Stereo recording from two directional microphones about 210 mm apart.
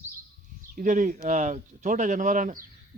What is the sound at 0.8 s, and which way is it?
Speech, 40° right (ahead or behind).